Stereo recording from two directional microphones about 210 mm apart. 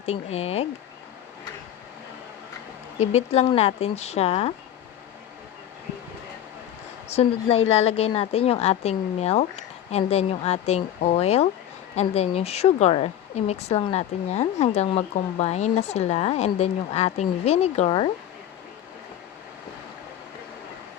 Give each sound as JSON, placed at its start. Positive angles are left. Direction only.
{"t": 0.0, "sound": "a woman's voice", "side_deg": 30}
{"t": 3.0, "sound": "speech", "side_deg": 30}
{"t": 7.1, "sound": "a woman's voice", "side_deg": 30}